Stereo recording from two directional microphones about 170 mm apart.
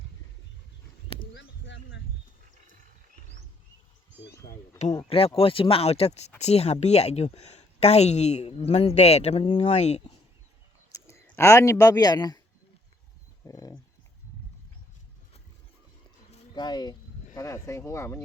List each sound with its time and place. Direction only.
1.3 s a sound: 90° left
5.0 s speech: 35° left (ahead or behind)
11.0 s speech: 15° left (ahead or behind)
13.4 s speech: 20° left (ahead or behind)
16.6 s speech: 25° left (ahead or behind)